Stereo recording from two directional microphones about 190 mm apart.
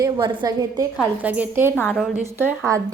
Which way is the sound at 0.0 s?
20° right (ahead or behind).